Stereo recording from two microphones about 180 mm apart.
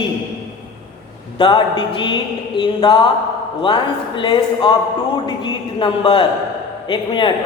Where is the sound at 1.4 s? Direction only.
25° left (ahead or behind).